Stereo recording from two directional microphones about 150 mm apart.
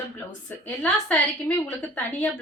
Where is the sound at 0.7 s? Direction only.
10° left (ahead or behind).